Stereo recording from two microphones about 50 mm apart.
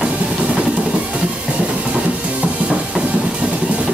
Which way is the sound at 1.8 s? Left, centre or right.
Right.